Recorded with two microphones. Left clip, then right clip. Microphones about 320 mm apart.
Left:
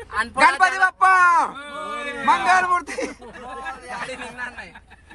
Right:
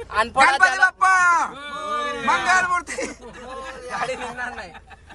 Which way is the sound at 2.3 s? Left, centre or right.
Centre.